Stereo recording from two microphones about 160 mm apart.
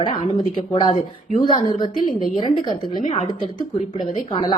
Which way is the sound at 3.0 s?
50° left (ahead or behind).